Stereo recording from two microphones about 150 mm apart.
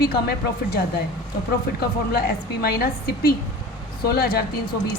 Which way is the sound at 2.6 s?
90° left.